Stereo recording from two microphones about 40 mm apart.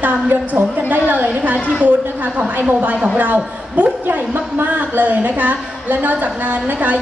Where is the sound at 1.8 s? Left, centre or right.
Right.